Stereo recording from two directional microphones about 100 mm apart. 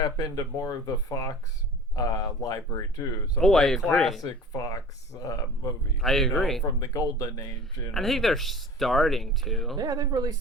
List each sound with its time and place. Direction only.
0.0 s speech: 35° left (ahead or behind)
3.3 s speech: 5° left (ahead or behind)
4.2 s speech: 35° left (ahead or behind)
6.0 s speech: 5° left (ahead or behind)
6.7 s speech: 35° left (ahead or behind)
7.9 s speech: centre (ahead or behind)
9.7 s speech: 40° right (ahead or behind)